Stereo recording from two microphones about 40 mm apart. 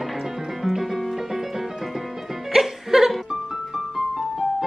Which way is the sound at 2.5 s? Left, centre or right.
Centre.